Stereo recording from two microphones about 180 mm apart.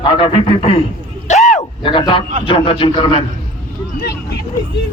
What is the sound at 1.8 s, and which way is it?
A man's voice, 30° left (ahead or behind).